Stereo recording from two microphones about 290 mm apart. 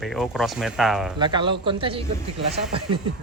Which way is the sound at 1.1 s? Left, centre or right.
Centre.